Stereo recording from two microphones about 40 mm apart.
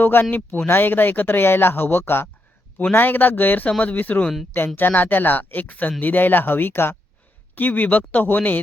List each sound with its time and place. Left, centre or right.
0.0 s speech: left
2.9 s speech: left
3.7 s speech: left
3.9 s speech: left
4.5 s speech: left
7.5 s speech: left